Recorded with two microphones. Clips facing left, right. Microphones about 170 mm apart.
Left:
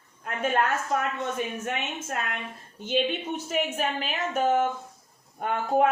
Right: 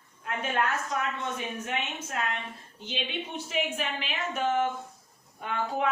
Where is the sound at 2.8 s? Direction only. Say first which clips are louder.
Left 9 dB; 50° left (ahead or behind).